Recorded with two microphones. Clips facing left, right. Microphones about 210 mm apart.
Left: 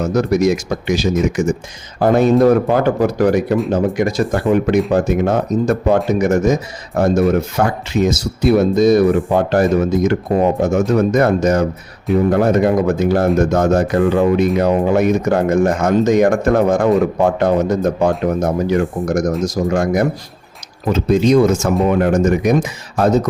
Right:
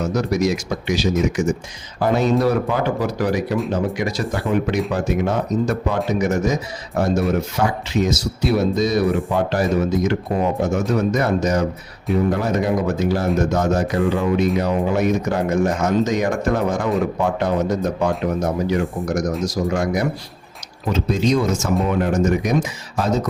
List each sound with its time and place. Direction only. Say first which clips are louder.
0.0 s speech: left 5 dB; 50° left (ahead or behind)